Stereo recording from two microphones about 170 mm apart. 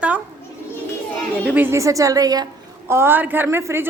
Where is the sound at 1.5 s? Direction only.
10° right (ahead or behind).